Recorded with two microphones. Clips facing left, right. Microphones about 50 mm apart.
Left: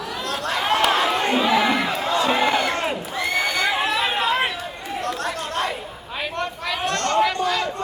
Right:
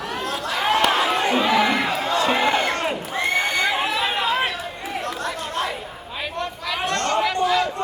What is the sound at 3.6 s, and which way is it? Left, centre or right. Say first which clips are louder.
Chatter: even; centre.